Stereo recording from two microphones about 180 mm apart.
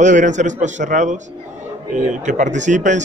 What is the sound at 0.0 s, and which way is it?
Speech, 45° right (ahead or behind).